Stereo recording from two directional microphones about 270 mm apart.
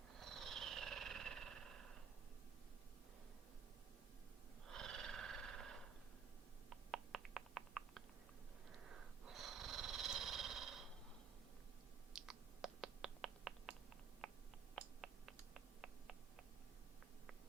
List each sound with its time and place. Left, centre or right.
0.2 s purr: centre
4.7 s frog: centre
6.7 s a sound: centre
8.9 s snoring: centre
12.1 s finger snapping: centre
14.2 s a sound: centre